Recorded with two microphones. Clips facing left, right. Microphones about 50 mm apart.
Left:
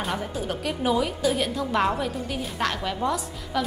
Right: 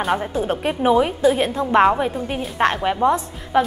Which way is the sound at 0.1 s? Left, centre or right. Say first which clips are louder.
Right 8 dB; right.